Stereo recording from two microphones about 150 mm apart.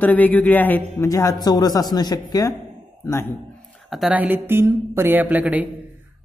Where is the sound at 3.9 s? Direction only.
5° right (ahead or behind).